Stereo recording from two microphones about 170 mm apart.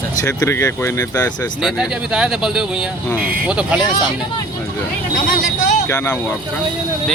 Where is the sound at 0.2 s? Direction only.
20° left (ahead or behind).